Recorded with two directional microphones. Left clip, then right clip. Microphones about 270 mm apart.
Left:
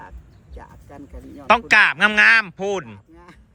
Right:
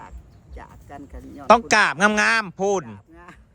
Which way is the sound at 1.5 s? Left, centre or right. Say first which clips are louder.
Left 1 dB; centre.